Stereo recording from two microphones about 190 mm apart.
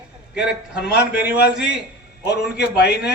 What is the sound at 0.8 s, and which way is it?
Speech, 60° left (ahead or behind).